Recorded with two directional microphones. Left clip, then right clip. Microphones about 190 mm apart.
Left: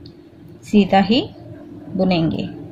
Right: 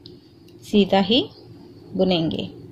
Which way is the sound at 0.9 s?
25° right (ahead or behind).